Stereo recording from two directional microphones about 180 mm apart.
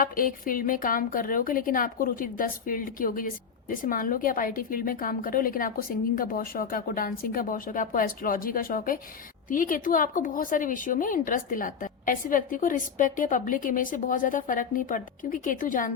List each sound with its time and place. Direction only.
0.0 s a woman's voice: 50° left (ahead or behind)